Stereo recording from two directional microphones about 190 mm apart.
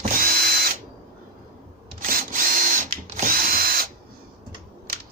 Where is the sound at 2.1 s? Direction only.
45° right (ahead or behind).